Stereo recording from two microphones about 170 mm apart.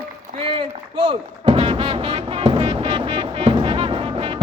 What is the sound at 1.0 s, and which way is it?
Music, 35° right (ahead or behind).